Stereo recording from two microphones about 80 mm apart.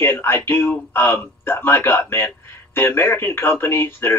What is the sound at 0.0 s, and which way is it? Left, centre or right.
Speech, left.